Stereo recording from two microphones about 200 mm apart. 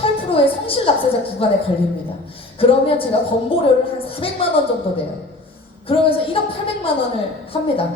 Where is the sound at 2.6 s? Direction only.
25° left (ahead or behind).